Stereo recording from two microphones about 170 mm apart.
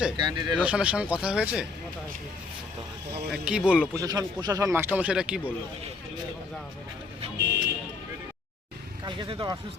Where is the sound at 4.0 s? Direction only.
20° right (ahead or behind); by 5.3 s 5° right (ahead or behind).